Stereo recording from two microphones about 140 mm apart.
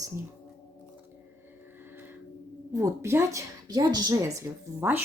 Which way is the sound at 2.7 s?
20° right (ahead or behind).